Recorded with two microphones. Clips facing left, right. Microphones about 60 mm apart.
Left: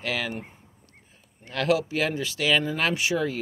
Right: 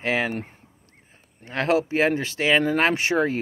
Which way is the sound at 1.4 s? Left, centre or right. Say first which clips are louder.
Right 2 dB; right.